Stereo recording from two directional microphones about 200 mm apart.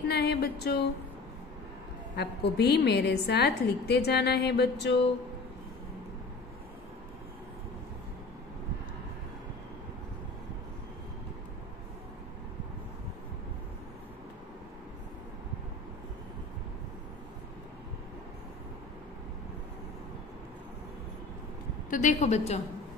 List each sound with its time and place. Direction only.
0.1 s a sound: 55° left (ahead or behind)
2.1 s a woman's voice: 55° left (ahead or behind)
21.9 s a woman's voice: 35° left (ahead or behind)